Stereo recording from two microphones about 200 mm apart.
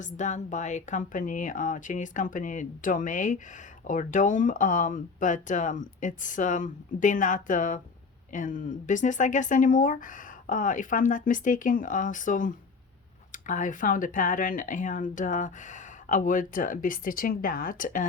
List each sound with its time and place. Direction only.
0.0 s speech: 35° left (ahead or behind)